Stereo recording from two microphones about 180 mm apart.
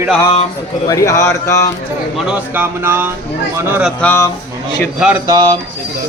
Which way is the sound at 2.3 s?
10° right (ahead or behind).